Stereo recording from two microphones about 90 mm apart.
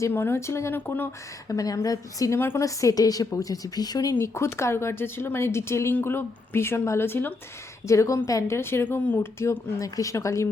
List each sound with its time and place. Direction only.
0.0 s speech: 25° left (ahead or behind)
1.5 s a woman's voice: 40° left (ahead or behind)
4.1 s speech: 30° left (ahead or behind)
7.9 s a woman's voice: 35° left (ahead or behind); by 9.2 s 15° left (ahead or behind)
9.4 s a woman's voice: 35° left (ahead or behind)